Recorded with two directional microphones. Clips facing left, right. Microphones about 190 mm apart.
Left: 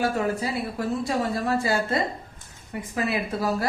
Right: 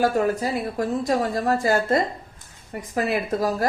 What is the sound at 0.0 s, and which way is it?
A woman's voice, 40° right (ahead or behind).